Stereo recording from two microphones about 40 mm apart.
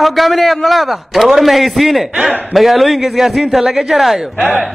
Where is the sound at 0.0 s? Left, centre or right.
Centre.